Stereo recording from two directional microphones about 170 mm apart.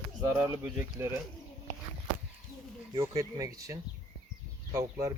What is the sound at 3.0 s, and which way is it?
Speech, 20° right (ahead or behind).